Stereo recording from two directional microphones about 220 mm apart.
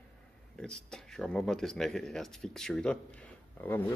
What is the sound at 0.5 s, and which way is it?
Speech, 5° left (ahead or behind).